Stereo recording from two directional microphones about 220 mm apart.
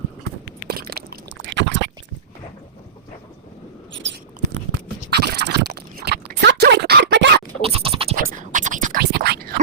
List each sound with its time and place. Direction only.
0.7 s a sound: 45° right (ahead or behind)
5.1 s biting: 50° right (ahead or behind)
7.6 s scratch: 25° right (ahead or behind)
8.1 s whispering: 40° right (ahead or behind)